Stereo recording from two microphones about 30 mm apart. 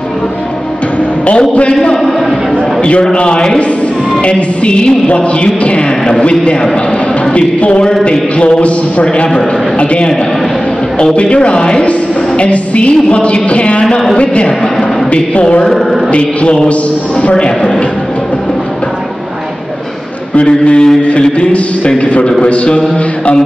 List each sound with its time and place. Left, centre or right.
2.8 s music: left
7.3 s music: left
8.1 s a man's voice: left
8.5 s music: left
9.0 s a man's voice: left
11.1 s music: left
13.8 s a woman's voice: centre
14.2 s music: left
15.0 s speech: left
16.1 s music: left
20.3 s music: left